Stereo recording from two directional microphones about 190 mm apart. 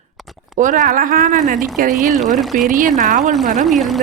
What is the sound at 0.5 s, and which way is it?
Speech, 40° right (ahead or behind).